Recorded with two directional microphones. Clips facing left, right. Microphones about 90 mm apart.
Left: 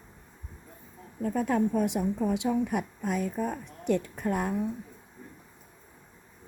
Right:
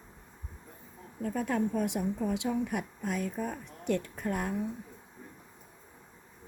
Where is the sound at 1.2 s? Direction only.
15° left (ahead or behind).